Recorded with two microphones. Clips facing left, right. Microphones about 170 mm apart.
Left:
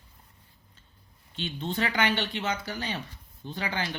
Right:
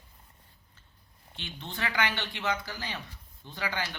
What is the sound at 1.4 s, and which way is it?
Speech, 25° left (ahead or behind).